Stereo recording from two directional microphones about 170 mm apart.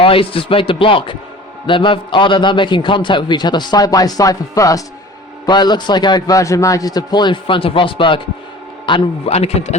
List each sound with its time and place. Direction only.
0.0 s a man's voice: 30° left (ahead or behind)